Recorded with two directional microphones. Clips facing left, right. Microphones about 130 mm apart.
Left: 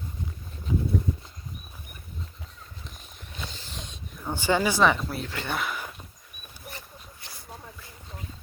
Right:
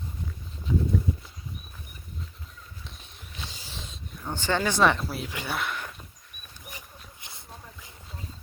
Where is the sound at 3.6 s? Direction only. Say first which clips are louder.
Left 1 dB; centre (ahead or behind).